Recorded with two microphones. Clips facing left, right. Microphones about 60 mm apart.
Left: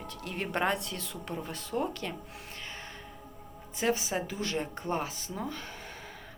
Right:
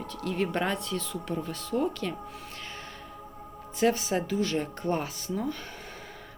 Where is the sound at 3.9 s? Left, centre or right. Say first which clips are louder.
Right 4 dB; centre.